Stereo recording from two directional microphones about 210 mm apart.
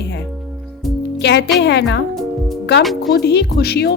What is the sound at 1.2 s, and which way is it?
Speech, 55° left (ahead or behind).